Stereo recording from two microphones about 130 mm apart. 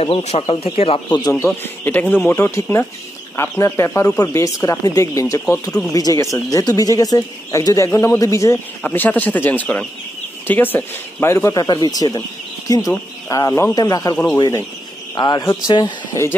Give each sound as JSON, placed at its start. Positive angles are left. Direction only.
{"t": 0.0, "sound": "speech", "side_deg": 50}
{"t": 1.4, "sound": "speech", "side_deg": 15}
{"t": 8.8, "sound": "speech", "side_deg": 15}